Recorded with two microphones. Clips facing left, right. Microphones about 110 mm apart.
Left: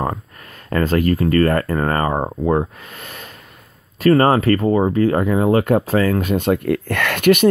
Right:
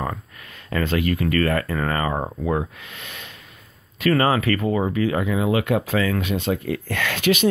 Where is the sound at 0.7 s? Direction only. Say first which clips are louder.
Left 5 dB; 45° left (ahead or behind).